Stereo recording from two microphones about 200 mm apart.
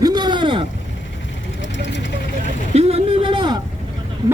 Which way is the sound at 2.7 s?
30° right (ahead or behind).